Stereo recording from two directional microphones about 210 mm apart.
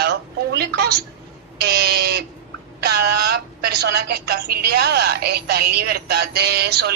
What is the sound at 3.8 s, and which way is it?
A woman's voice, 50° right (ahead or behind).